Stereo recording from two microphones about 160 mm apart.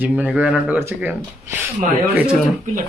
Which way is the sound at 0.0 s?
10° right (ahead or behind).